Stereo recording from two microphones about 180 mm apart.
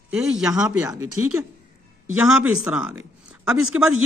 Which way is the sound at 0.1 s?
5° right (ahead or behind).